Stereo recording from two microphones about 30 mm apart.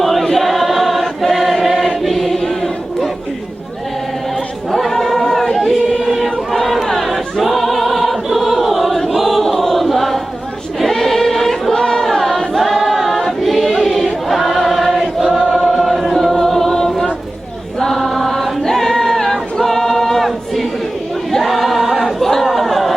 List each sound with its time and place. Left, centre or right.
0.0 s choir: centre
4.7 s choir: centre
5.5 s a sound: centre
6.1 s choir: centre
6.5 s chatter: centre
7.1 s choir: centre
11.7 s a sound: centre
12.4 s choir: centre
16.6 s choir: centre
21.3 s choir: centre
22.2 s chatter: centre
22.4 s a sound: centre